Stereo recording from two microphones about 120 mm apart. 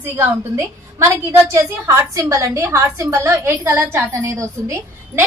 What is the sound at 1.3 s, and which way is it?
A woman's voice, 25° right (ahead or behind).